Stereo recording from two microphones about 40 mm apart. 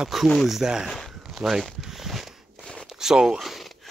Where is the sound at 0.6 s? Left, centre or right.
Centre.